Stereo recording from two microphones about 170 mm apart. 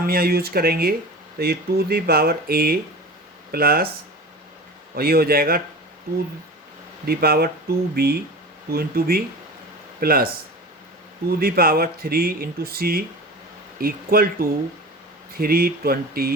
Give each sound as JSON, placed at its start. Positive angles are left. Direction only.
{"t": 0.0, "sound": "speech", "side_deg": -60}
{"t": 4.9, "sound": "speech", "side_deg": -65}
{"t": 7.0, "sound": "speech", "side_deg": -65}